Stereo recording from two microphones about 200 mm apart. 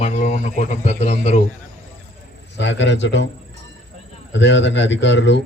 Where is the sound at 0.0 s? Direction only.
35° left (ahead or behind).